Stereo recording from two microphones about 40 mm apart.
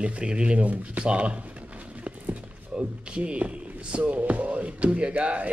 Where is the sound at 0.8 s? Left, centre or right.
Right.